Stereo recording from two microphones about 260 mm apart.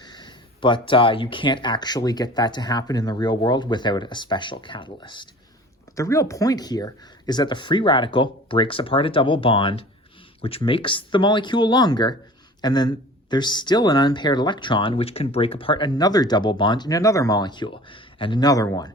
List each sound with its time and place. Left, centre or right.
0.0 s speech: centre